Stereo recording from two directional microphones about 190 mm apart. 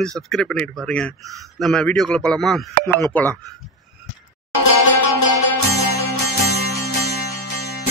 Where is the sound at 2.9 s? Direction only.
15° left (ahead or behind).